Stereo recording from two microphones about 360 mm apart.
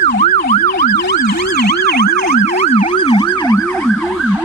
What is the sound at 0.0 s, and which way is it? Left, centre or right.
Emergency vehicle, centre.